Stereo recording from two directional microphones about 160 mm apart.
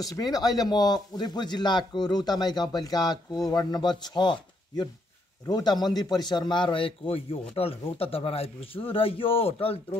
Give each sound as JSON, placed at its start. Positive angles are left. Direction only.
{"t": 0.0, "sound": "a man's voice", "side_deg": 25}